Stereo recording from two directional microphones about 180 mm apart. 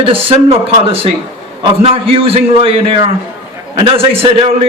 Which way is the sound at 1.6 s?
30° right (ahead or behind).